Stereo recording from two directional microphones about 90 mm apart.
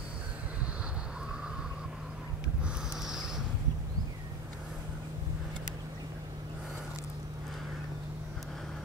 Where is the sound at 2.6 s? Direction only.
5° right (ahead or behind).